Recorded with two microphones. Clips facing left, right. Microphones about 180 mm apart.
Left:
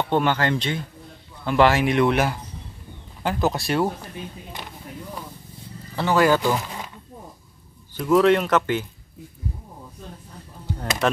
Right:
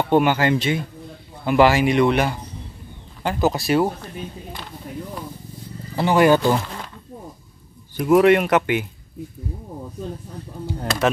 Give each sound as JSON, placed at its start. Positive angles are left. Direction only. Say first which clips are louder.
{"t": 0.1, "sound": "speech", "louder": "right 5 dB", "side_deg": -10}
{"t": 5.9, "sound": "speech", "louder": "right 3 dB", "side_deg": -15}
{"t": 7.9, "sound": "speech", "louder": "right 3 dB", "side_deg": -15}